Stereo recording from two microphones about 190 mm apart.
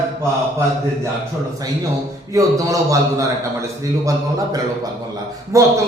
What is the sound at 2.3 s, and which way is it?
A man's voice, 20° right (ahead or behind).